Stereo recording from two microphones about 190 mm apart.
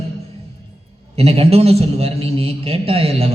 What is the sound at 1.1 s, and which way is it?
A man's voice, 30° right (ahead or behind).